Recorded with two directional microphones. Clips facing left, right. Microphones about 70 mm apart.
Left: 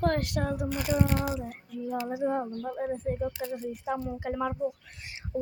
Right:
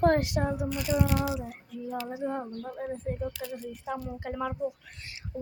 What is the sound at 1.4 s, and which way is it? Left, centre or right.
Child singing, centre.